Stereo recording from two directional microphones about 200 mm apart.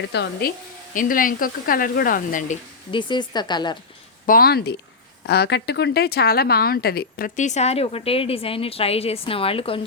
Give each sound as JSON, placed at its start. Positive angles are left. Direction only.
{"t": 0.1, "sound": "speech", "side_deg": 55}
{"t": 0.9, "sound": "speech", "side_deg": 45}
{"t": 2.9, "sound": "a woman's voice", "side_deg": 25}
{"t": 4.3, "sound": "speech", "side_deg": 50}